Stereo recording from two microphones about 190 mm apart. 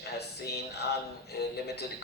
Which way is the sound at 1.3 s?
60° left (ahead or behind).